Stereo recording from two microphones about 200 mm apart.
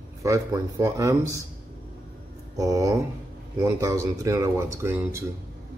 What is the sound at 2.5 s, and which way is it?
Speech, 15° right (ahead or behind).